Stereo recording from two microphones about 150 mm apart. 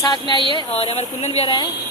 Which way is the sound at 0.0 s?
30° left (ahead or behind).